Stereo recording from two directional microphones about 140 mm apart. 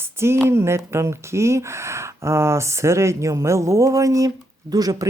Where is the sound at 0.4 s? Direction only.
20° right (ahead or behind).